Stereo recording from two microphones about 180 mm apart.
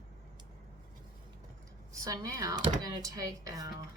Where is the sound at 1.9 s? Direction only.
20° right (ahead or behind).